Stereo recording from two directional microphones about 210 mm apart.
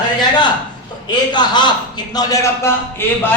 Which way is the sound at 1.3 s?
20° left (ahead or behind).